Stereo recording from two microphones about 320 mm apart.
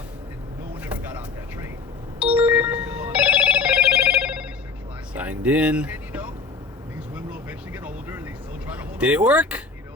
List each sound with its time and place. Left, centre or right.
0.8 s vehicle: centre
2.2 s telephone bell ringing: centre
5.1 s music: centre
7.7 s vehicle: centre
8.7 s speech: centre